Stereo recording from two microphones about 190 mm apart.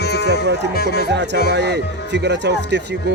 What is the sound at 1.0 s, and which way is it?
Music, 65° right (ahead or behind).